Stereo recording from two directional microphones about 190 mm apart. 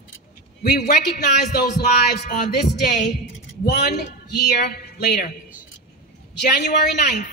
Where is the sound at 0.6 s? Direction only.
55° left (ahead or behind).